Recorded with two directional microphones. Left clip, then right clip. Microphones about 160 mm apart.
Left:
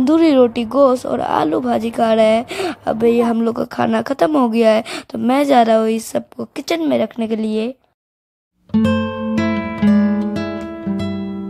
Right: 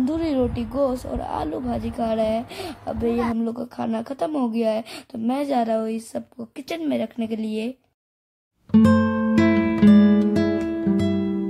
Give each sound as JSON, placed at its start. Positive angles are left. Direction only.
{"t": 0.0, "sound": "speech", "side_deg": 30}
{"t": 8.7, "sound": "music", "side_deg": 0}